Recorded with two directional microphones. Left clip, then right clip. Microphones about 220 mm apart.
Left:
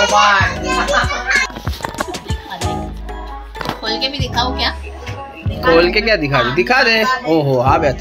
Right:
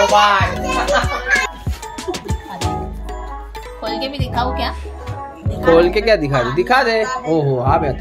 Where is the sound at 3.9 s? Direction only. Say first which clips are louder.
Left 1 dB; 35° right (ahead or behind).